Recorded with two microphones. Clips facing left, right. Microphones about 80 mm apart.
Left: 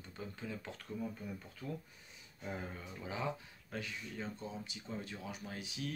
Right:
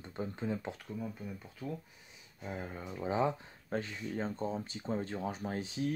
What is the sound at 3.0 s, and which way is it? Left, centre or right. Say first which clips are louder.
Speech: right 9 dB; right.